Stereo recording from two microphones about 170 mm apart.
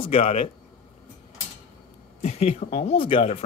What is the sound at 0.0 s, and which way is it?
Speech, 35° left (ahead or behind).